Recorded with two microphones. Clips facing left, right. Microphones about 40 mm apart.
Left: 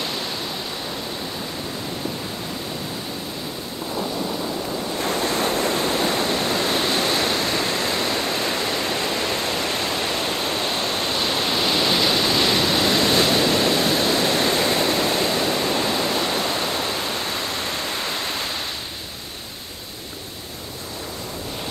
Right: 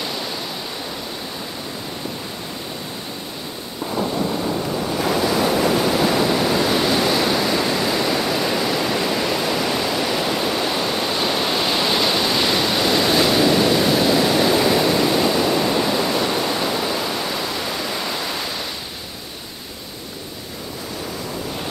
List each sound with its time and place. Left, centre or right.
0.0 s waterfall: centre
5.3 s waves: right; by 7.2 s centre
7.2 s waterfall: centre
9.7 s pink noise: centre
10.3 s pink noise: centre
10.6 s waterfall: centre
17.4 s a sound: centre
17.7 s pink noise: centre
18.3 s waves: centre